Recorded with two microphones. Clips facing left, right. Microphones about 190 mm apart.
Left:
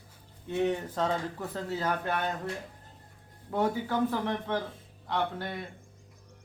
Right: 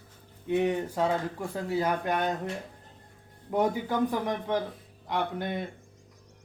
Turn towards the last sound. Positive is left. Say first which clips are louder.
# right 2 dB
turn(degrees=-20)  # may be behind; listen again after turning